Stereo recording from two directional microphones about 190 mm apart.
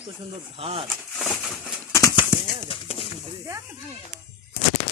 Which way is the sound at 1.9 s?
20° left (ahead or behind).